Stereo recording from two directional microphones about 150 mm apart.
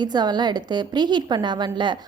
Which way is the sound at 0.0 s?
30° right (ahead or behind).